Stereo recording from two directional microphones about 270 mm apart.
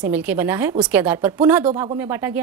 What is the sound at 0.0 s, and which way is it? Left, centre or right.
A woman's voice, centre.